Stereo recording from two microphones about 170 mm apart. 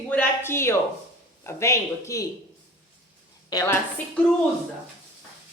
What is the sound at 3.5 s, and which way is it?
Speech, 20° left (ahead or behind).